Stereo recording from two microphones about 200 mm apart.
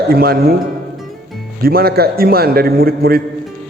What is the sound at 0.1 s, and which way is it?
Speech, 50° right (ahead or behind).